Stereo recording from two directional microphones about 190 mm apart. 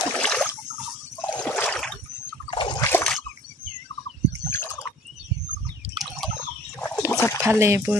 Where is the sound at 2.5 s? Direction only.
25° left (ahead or behind).